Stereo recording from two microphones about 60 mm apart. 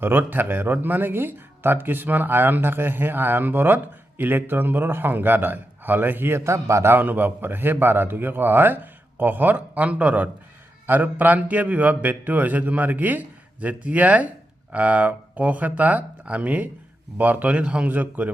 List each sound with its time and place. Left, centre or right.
0.0 s speech: right
6.9 s a man's voice: right